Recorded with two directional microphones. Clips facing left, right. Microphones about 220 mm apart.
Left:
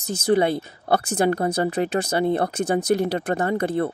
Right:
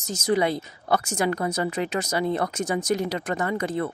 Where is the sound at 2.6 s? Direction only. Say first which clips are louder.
Left 4 dB; 60° left (ahead or behind).